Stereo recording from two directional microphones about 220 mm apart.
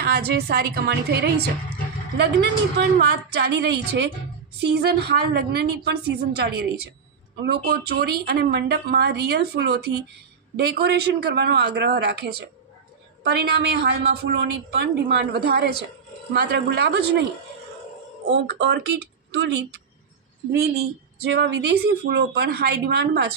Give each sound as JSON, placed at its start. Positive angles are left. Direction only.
{"t": 0.0, "sound": "a woman's voice", "side_deg": -45}
{"t": 18.3, "sound": "a woman's voice", "side_deg": -55}